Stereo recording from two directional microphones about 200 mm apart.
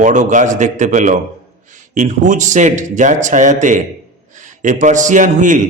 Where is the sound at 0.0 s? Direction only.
40° right (ahead or behind).